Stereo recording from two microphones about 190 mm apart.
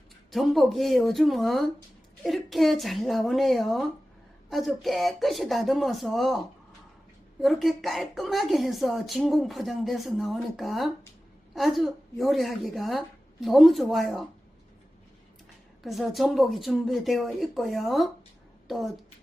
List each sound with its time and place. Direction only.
0.3 s speech: centre (ahead or behind)
7.4 s speech: centre (ahead or behind)
15.8 s speech: centre (ahead or behind)